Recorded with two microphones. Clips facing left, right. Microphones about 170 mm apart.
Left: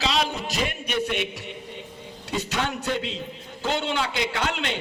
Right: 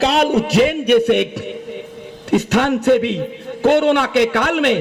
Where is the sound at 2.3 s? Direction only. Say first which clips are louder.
Right 13 dB; 65° right (ahead or behind).